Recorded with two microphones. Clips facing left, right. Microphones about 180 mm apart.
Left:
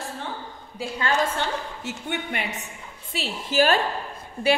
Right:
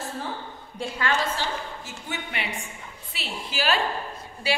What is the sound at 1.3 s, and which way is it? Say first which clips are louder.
A woman's voice: left 2 dB; 60° left (ahead or behind).